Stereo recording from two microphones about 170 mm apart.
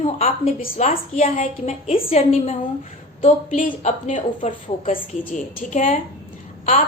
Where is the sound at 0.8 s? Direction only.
40° left (ahead or behind).